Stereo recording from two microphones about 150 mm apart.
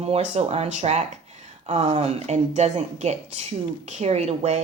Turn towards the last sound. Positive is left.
turn(degrees=-45)  # may be behind; listen again after turning